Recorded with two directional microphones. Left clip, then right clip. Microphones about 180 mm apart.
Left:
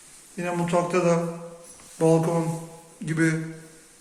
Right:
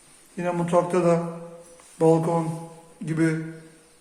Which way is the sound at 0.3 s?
20° right (ahead or behind).